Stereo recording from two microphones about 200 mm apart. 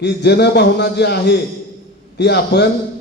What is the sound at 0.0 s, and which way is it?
A man's voice, 55° left (ahead or behind).